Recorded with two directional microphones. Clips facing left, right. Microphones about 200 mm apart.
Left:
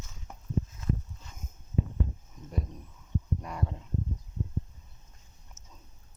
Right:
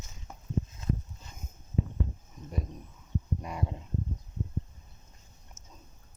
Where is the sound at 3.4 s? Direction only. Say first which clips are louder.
Even; 15° right (ahead or behind).